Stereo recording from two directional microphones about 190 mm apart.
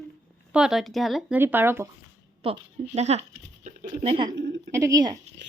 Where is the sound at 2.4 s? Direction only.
30° right (ahead or behind).